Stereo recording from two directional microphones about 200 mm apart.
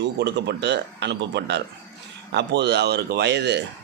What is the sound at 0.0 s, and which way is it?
A man's voice, 60° right (ahead or behind).